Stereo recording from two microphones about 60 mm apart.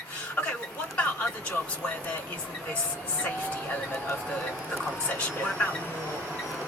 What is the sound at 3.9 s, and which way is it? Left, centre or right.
Speech, left.